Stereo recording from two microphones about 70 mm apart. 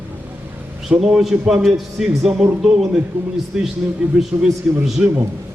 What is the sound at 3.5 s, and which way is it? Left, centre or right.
A man's voice, centre.